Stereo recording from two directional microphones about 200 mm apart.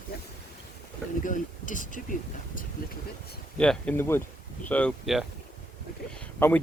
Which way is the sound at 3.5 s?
5° left (ahead or behind).